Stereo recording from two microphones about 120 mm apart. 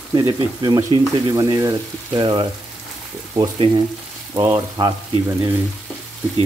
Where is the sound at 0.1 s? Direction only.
35° right (ahead or behind).